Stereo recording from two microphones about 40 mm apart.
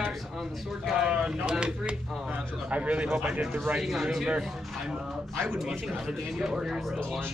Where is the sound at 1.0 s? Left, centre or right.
Centre.